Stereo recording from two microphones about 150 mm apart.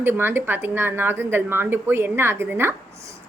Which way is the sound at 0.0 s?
15° right (ahead or behind).